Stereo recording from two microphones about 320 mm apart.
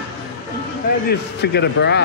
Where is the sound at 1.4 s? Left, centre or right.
Left.